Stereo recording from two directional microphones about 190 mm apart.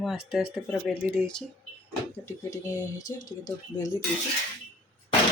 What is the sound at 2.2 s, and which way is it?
Speech, 15° left (ahead or behind).